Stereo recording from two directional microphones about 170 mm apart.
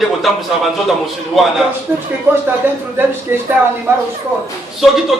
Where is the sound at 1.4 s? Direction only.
Centre (ahead or behind).